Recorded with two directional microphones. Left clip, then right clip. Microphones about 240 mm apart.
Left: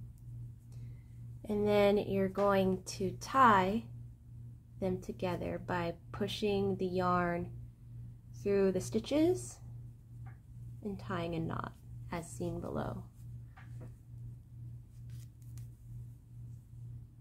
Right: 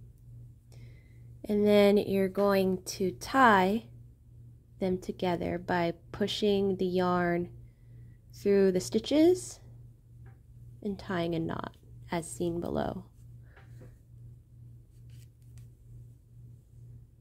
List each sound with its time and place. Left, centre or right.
1.4 s speech: right
10.8 s speech: right